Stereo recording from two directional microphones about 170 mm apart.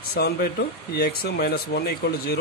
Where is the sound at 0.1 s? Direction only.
70° left (ahead or behind).